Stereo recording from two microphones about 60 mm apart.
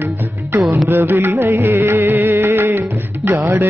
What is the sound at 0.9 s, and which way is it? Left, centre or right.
Music, right.